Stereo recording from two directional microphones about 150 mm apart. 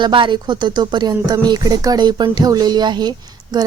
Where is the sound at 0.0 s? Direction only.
35° right (ahead or behind).